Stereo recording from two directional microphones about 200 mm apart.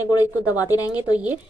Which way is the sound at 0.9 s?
5° right (ahead or behind).